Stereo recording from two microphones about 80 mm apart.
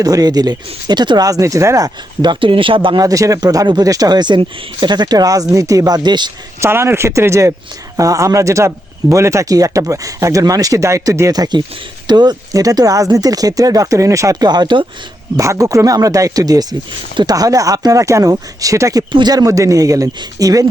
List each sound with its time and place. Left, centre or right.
0.0 s speech: right
1.3 s speech: right
2.2 s speech: right
3.0 s speech: right
6.6 s speech: right
11.3 s speech: right
14.4 s speech: right
15.4 s speech: right
19.1 s speech: right